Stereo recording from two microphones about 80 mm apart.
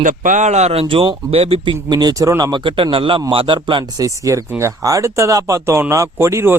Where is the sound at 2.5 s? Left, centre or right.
Right.